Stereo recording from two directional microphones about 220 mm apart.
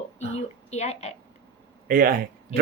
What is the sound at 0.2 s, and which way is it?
Speech, 30° left (ahead or behind).